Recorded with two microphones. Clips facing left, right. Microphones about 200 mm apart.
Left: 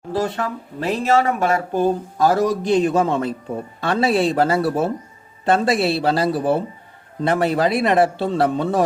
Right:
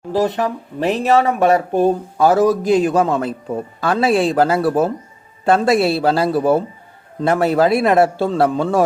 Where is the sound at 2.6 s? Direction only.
Centre (ahead or behind).